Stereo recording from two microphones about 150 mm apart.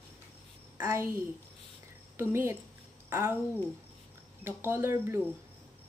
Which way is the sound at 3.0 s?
15° right (ahead or behind).